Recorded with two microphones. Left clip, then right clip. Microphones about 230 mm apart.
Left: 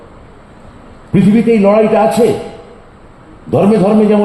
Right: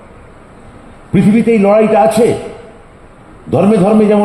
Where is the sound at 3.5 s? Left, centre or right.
Right.